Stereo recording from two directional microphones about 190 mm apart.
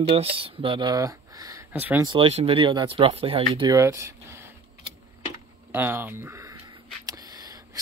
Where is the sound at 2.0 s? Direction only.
30° right (ahead or behind).